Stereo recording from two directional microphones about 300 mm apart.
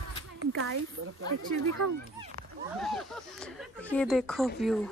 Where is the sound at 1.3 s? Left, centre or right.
Right.